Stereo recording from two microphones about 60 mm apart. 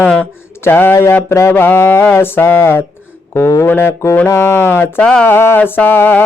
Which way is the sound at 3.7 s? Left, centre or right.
Left.